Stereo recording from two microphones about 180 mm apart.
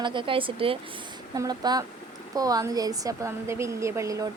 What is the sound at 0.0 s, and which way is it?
A woman's voice, 25° right (ahead or behind).